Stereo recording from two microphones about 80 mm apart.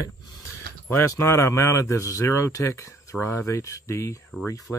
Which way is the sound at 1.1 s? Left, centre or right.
Left.